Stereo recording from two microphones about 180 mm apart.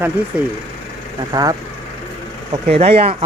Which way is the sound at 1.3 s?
20° right (ahead or behind).